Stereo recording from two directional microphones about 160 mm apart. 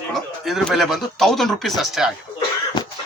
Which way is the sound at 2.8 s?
30° left (ahead or behind).